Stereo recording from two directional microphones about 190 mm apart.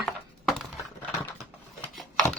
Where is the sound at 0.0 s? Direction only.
Centre (ahead or behind).